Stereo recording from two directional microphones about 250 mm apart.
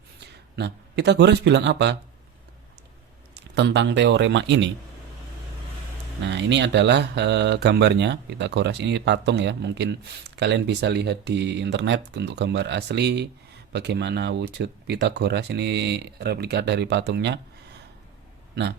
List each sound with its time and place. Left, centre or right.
0.5 s speech: right
3.3 s speech: right
6.2 s speech: right